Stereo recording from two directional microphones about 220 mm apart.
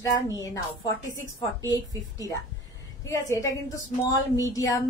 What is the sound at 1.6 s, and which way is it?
A woman's voice, 15° left (ahead or behind).